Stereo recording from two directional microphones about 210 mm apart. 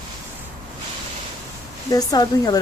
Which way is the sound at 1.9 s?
15° left (ahead or behind).